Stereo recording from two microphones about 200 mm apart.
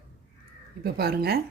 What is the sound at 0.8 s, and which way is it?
Speech, 50° right (ahead or behind).